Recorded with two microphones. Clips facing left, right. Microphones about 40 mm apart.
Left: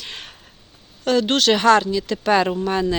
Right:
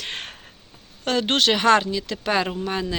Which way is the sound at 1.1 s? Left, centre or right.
Right.